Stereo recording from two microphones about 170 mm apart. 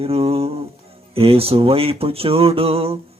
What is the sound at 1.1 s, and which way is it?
Speech, 35° right (ahead or behind).